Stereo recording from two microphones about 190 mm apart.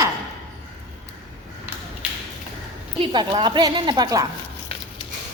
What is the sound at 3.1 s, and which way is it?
Speech, 25° right (ahead or behind).